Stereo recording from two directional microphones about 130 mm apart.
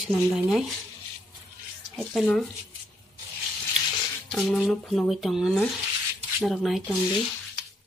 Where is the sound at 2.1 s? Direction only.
5° left (ahead or behind).